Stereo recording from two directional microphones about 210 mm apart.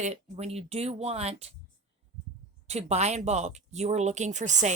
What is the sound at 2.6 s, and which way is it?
Speech, 30° right (ahead or behind).